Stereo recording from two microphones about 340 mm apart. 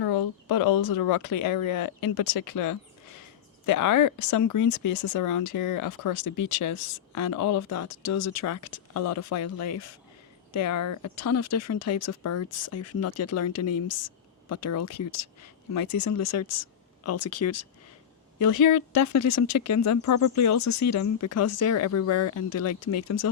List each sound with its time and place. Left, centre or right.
0.0 s speech: left
18.3 s speech: left